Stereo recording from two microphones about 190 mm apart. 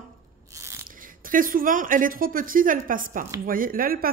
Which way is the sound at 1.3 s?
45° right (ahead or behind).